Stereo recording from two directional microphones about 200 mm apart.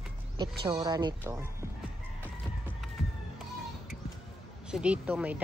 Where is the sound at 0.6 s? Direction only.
25° right (ahead or behind).